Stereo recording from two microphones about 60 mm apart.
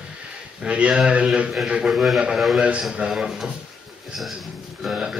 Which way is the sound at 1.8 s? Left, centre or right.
Centre.